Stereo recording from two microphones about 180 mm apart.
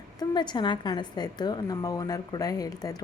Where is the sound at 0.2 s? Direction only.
25° left (ahead or behind).